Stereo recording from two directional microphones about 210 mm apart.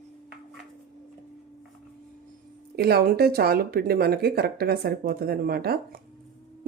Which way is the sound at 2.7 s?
45° right (ahead or behind).